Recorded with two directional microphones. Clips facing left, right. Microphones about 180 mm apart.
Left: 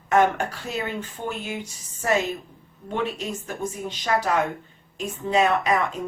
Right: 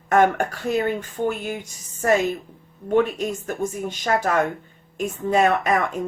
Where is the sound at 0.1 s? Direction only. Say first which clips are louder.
Right 2 dB; 50° right (ahead or behind).